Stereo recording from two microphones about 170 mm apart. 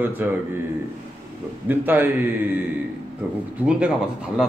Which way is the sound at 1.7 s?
10° right (ahead or behind).